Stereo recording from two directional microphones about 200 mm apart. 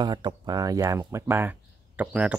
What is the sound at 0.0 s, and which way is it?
Speech, 20° right (ahead or behind).